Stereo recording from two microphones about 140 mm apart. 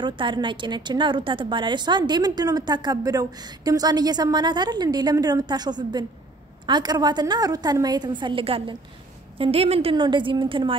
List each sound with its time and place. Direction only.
0.0 s a woman's voice: 35° right (ahead or behind)